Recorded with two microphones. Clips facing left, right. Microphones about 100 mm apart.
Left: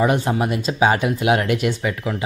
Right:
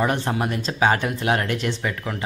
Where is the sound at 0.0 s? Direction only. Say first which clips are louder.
Left 4 dB; 10° left (ahead or behind).